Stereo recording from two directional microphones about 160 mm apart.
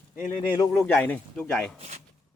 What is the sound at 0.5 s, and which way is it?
Speech, 20° left (ahead or behind).